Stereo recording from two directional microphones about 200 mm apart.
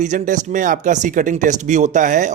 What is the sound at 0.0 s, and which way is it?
Speech, 40° right (ahead or behind).